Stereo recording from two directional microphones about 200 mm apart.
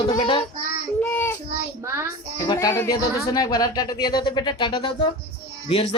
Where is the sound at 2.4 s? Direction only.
15° left (ahead or behind).